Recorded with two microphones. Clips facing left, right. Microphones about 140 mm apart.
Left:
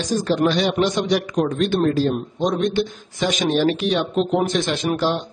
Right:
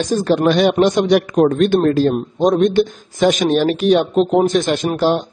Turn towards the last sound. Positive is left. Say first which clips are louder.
# right 5 dB
turn(degrees=-45)  # may be behind; listen again after turning